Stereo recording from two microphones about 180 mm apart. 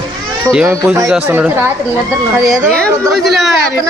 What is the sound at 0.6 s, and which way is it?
Speech, 15° right (ahead or behind).